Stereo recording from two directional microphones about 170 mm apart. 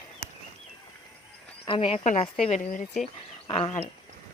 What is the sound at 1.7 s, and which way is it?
Speech, 35° left (ahead or behind).